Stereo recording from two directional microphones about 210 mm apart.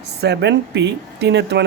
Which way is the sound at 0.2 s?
55° right (ahead or behind).